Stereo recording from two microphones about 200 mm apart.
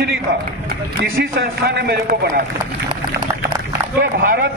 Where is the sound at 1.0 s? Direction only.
50° right (ahead or behind).